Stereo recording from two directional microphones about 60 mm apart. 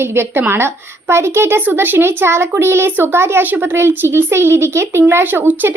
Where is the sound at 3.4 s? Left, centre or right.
Right.